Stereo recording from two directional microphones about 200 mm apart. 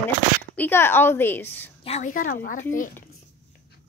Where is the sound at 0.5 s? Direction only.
10° left (ahead or behind).